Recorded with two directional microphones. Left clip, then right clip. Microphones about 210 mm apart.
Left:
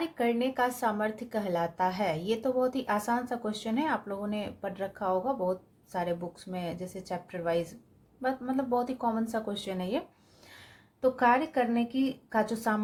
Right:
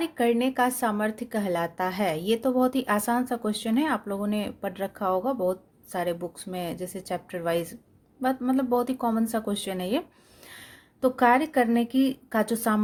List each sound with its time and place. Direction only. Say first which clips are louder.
0.0 s speech: right 5 dB; 35° right (ahead or behind)
10.4 s a sound: right 6 dB; 40° right (ahead or behind)
11.2 s speech: right 5 dB; 45° right (ahead or behind)